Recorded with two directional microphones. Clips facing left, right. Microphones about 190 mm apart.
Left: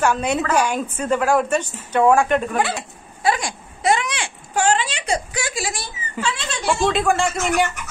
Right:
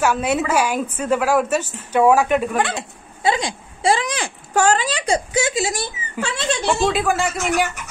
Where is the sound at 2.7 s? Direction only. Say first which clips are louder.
Right 2 dB; 25° right (ahead or behind); by 5.2 s 40° right (ahead or behind).